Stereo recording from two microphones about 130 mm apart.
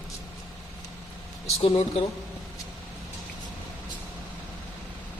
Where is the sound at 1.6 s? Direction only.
50° left (ahead or behind).